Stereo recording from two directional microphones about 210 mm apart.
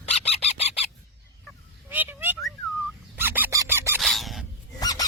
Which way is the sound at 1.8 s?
10° right (ahead or behind).